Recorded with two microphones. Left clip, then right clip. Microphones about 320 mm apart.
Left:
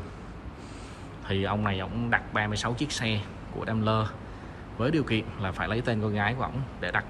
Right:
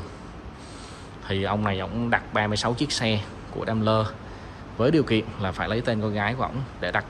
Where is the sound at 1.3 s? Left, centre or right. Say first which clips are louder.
Right 3 dB; centre.